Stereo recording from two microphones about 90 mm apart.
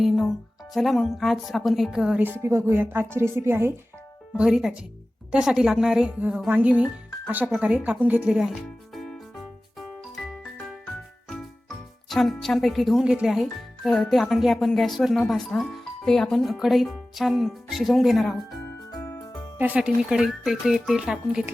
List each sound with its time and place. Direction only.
0.7 s speech: centre (ahead or behind)
2.4 s speech: 30° right (ahead or behind)
4.4 s a woman's voice: 10° right (ahead or behind)
8.4 s music: centre (ahead or behind)
12.0 s speech: centre (ahead or behind)
18.9 s music: 30° left (ahead or behind)
19.5 s speech: 15° right (ahead or behind)